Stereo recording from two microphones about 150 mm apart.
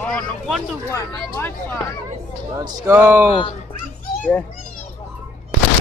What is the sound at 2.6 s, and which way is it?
Speech, 15° right (ahead or behind).